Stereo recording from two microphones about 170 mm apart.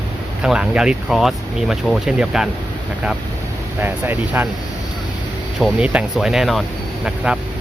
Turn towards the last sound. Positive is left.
turn(degrees=0)  # may be behind; listen again after turning